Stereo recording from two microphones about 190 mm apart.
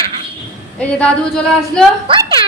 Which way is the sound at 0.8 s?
5° left (ahead or behind).